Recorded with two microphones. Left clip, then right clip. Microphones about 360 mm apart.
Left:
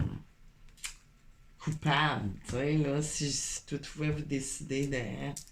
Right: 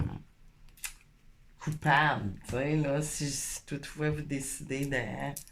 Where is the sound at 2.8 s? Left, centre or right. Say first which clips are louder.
Right 1 dB; centre.